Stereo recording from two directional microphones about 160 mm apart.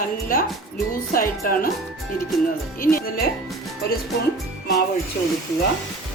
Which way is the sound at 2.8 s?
65° left (ahead or behind).